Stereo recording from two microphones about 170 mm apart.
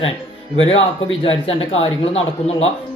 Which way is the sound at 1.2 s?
35° left (ahead or behind).